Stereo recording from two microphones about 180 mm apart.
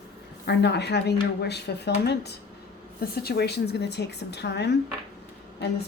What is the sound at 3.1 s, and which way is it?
A woman's voice, 60° left (ahead or behind).